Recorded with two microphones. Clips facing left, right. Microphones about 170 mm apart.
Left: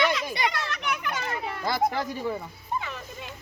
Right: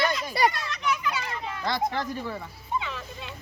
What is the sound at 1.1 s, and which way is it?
Children playing, 45° left (ahead or behind).